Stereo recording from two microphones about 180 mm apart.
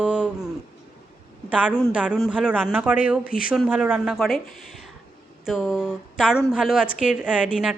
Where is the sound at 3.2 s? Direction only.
50° left (ahead or behind).